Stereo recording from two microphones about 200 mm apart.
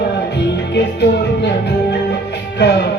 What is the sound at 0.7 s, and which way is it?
Music, 60° left (ahead or behind).